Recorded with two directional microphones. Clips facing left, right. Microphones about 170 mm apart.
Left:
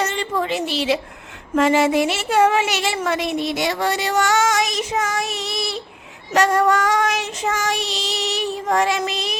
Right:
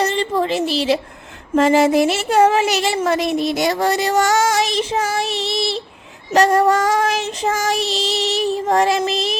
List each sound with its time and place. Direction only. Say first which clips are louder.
0.0 s a woman's voice: right 4 dB; 35° right (ahead or behind)